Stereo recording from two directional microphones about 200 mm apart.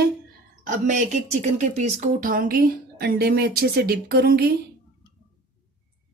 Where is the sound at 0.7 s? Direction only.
40° right (ahead or behind).